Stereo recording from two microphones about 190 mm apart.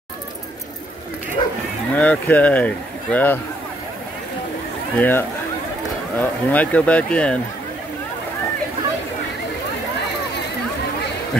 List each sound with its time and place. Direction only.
1.4 s cattle: 25° left (ahead or behind)
2.0 s speech: 10° left (ahead or behind)
4.9 s speech: 10° left (ahead or behind)